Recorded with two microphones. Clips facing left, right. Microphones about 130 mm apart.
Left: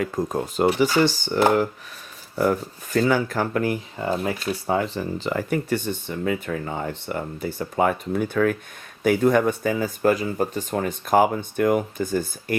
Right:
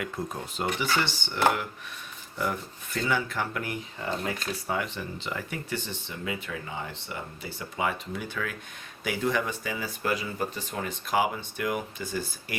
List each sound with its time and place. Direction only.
0.2 s speech: 40° left (ahead or behind)